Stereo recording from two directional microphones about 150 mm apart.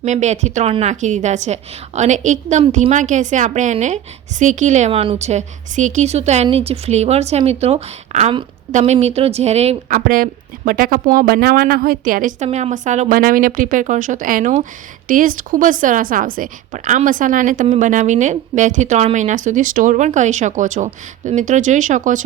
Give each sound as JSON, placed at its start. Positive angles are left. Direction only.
{"t": 0.0, "sound": "a woman's voice", "side_deg": -50}
{"t": 9.9, "sound": "a woman's voice", "side_deg": -70}
{"t": 12.5, "sound": "a woman's voice", "side_deg": -45}